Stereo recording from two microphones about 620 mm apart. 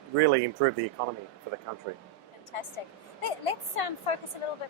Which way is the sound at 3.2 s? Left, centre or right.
Left.